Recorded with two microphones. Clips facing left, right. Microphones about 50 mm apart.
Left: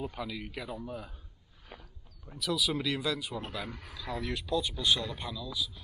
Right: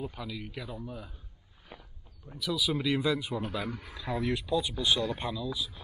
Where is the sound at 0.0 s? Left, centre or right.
Centre.